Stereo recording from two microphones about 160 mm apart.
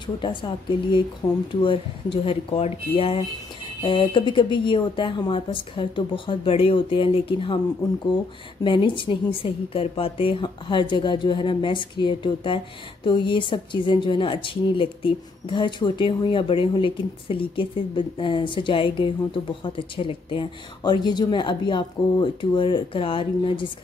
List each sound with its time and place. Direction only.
0.0 s a woman's voice: 30° left (ahead or behind)
8.6 s a woman's voice: 30° left (ahead or behind)